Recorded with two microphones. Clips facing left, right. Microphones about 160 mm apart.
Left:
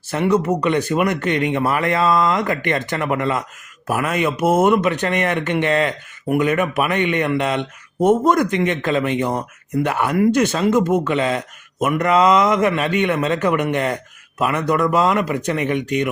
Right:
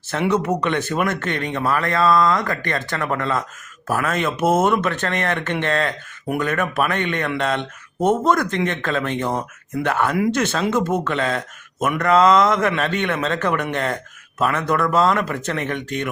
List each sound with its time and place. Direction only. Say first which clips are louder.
0.4 s a man's voice: left 3 dB; 10° left (ahead or behind)